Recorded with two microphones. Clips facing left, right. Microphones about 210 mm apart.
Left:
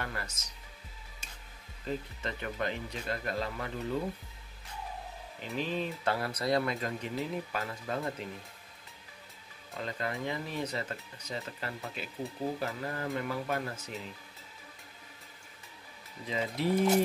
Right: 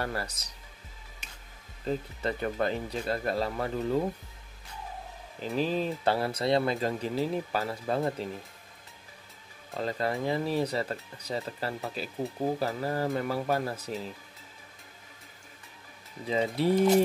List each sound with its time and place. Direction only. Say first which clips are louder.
0.0 s speech: right 6 dB; 35° right (ahead or behind)
1.9 s speech: right 5 dB; 35° right (ahead or behind)
5.4 s speech: right 6 dB; 40° right (ahead or behind)
9.8 s speech: right 6 dB; 35° right (ahead or behind)
16.3 s speech: right 6 dB; 35° right (ahead or behind)